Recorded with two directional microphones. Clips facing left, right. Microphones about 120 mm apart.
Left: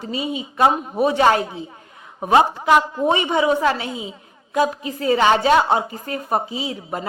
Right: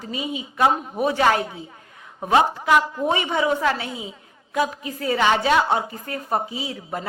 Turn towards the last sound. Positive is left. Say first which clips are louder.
# left 3 dB
turn(degrees=20)  # may be behind; listen again after turning